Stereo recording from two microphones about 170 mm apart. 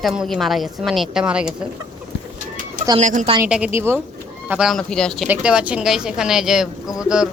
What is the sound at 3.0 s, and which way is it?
Speech, 45° right (ahead or behind).